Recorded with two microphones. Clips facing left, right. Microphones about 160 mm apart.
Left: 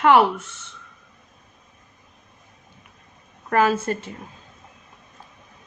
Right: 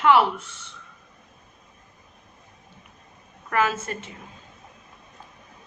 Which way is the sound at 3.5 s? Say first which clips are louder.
Left 5 dB; 40° left (ahead or behind).